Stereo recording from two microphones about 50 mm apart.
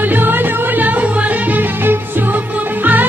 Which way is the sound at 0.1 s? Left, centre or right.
Right.